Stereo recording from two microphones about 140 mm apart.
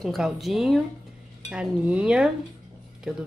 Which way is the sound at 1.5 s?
5° right (ahead or behind).